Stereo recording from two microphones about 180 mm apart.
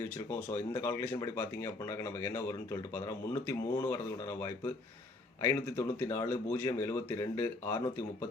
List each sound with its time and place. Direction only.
0.8 s speech: 15° left (ahead or behind)